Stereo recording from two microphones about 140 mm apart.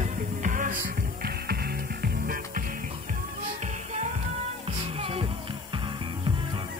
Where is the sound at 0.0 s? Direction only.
65° right (ahead or behind); by 2.6 s 90° right.